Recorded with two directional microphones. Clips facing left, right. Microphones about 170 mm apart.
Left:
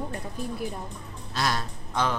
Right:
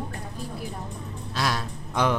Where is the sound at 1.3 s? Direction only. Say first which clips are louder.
Even; 5° right (ahead or behind).